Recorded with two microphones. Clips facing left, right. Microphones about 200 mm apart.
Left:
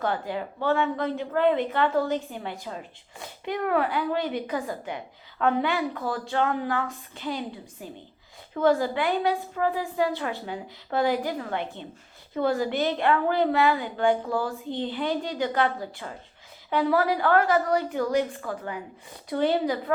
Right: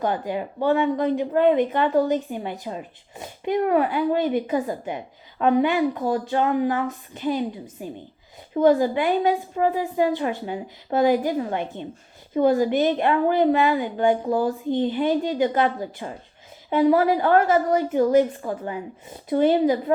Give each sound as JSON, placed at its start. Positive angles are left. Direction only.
{"t": 0.0, "sound": "a woman's voice", "side_deg": -15}